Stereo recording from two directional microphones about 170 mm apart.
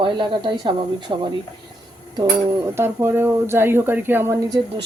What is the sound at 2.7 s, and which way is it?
Speech, 15° right (ahead or behind).